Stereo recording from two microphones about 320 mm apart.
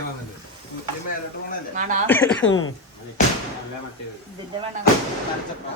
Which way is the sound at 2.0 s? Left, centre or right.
Centre.